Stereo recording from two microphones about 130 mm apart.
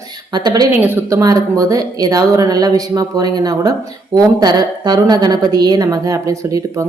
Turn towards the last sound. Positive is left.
turn(degrees=-25)  # may be behind; listen again after turning